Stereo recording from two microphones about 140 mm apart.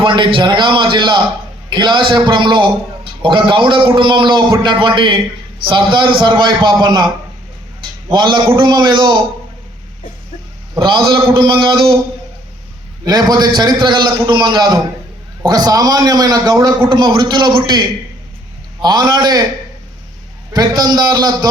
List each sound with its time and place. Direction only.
0.0 s a man's voice: 35° right (ahead or behind)
11.3 s a man's voice: 35° right (ahead or behind)
13.1 s a man's voice: 30° right (ahead or behind)
20.5 s a man's voice: 30° right (ahead or behind)